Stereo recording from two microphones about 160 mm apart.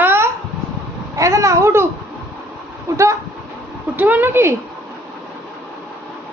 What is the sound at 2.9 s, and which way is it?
A woman's voice, 20° right (ahead or behind).